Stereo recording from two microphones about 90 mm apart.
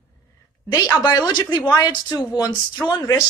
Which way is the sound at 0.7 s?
45° left (ahead or behind).